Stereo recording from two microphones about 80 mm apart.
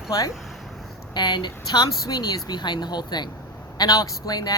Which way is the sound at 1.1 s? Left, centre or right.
Left.